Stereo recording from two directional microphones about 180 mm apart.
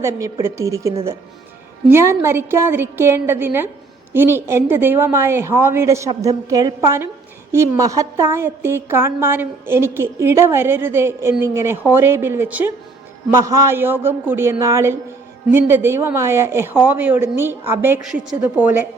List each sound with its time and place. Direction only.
0.0 s a woman's voice: 15° right (ahead or behind)